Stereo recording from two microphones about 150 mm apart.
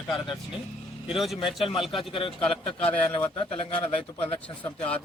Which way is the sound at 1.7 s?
35° left (ahead or behind).